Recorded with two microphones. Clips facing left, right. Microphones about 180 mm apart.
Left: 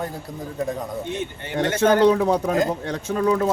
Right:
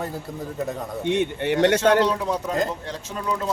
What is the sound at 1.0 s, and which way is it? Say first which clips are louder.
Speech: right 7 dB; 70° right (ahead or behind).